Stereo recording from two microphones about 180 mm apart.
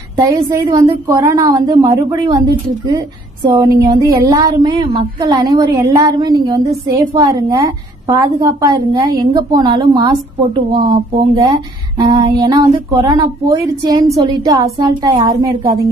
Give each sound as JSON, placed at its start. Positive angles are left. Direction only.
{"t": 0.1, "sound": "a woman's voice", "side_deg": -20}
{"t": 3.4, "sound": "a woman's voice", "side_deg": -20}